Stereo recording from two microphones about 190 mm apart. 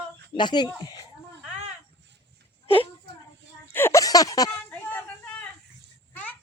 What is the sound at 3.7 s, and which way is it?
Speech, 15° left (ahead or behind).